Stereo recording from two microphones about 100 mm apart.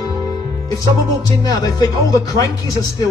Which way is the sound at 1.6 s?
35° left (ahead or behind).